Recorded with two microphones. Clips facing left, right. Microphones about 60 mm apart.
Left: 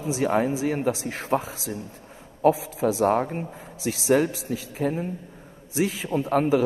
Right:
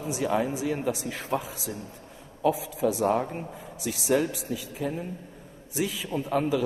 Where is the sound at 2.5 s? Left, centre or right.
Left.